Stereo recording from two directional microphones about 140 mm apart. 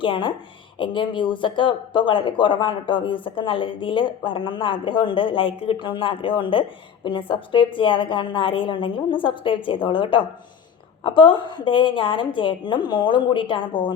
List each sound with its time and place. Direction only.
0.0 s speech: 35° left (ahead or behind)